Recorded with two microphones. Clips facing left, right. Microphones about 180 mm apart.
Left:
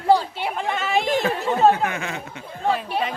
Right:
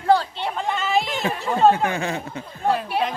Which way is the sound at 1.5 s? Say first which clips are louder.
Right 1 dB; centre (ahead or behind).